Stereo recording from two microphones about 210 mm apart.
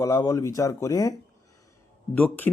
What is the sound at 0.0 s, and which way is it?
A man's voice, 15° left (ahead or behind).